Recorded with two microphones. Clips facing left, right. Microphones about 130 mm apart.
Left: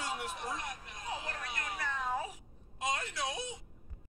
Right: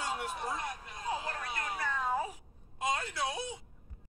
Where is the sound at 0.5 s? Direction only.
30° right (ahead or behind).